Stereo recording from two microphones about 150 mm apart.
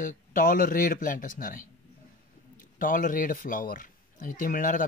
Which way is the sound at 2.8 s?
65° left (ahead or behind).